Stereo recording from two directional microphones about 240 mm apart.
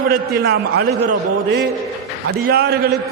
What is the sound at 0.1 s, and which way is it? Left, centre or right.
Speech, right.